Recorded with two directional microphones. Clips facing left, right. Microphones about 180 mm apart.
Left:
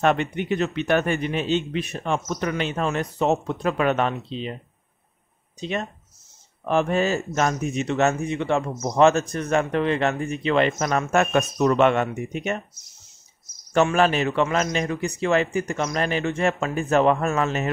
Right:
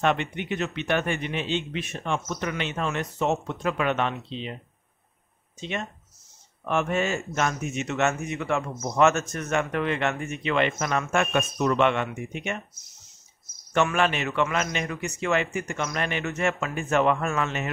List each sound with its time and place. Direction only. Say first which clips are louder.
0.0 s speech: left 4 dB; 40° left (ahead or behind)
5.6 s speech: left 4 dB; 35° left (ahead or behind)
13.7 s speech: left 4 dB; 35° left (ahead or behind)